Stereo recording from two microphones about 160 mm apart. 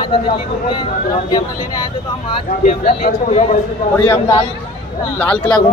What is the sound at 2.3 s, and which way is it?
Speech, 35° left (ahead or behind).